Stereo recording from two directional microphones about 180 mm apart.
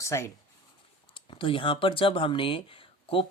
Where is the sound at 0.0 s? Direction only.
15° left (ahead or behind).